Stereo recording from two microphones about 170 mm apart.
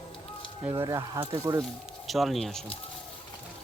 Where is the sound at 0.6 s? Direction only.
15° right (ahead or behind).